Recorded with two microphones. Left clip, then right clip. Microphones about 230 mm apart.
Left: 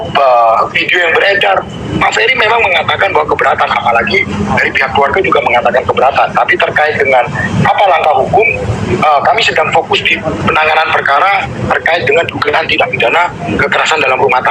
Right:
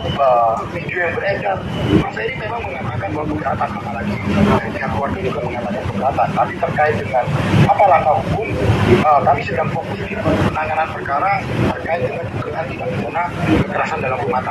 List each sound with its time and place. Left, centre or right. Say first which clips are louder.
0.2 s a sound: left 7 dB; left
0.9 s speech: left 9 dB; left
7.7 s speech: left 3 dB; left
10.6 s speech: left 10 dB; left
13.7 s speech: left 10 dB; left